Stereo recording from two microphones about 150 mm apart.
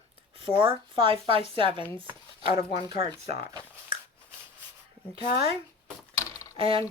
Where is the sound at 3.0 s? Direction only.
40° right (ahead or behind).